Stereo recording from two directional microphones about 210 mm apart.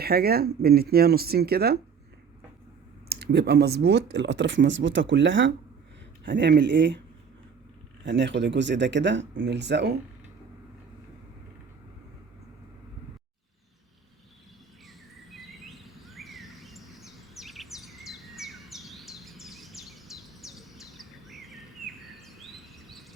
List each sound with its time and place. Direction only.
0.0 s speech: 45° right (ahead or behind)
3.1 s speech: 50° right (ahead or behind)
8.0 s speech: 55° right (ahead or behind)
15.3 s bird: centre (ahead or behind)